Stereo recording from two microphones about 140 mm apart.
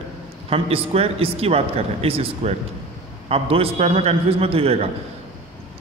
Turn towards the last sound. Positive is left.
turn(degrees=-45)  # may be behind; listen again after turning